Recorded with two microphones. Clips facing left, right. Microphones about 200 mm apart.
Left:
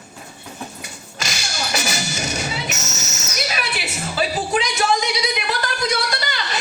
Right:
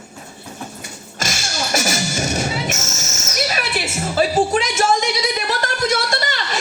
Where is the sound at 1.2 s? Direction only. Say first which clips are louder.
Right 3 dB; 50° right (ahead or behind).